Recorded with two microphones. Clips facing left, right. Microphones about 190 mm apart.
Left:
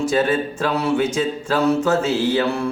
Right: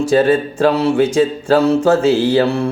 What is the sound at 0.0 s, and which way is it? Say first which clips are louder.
Speech: right 6 dB; 30° right (ahead or behind).